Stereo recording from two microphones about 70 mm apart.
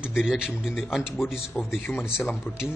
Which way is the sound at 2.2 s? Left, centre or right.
Left.